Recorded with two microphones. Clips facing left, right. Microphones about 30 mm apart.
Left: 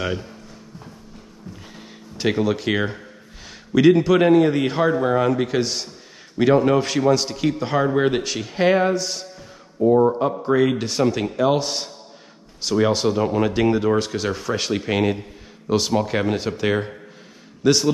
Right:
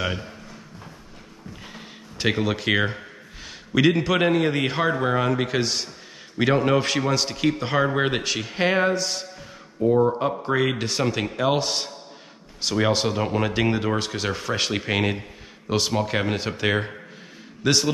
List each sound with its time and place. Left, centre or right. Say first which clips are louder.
1.7 s a sound: even; centre
3.4 s a man's voice: left 5 dB; centre
9.8 s a man's voice: left 3 dB; centre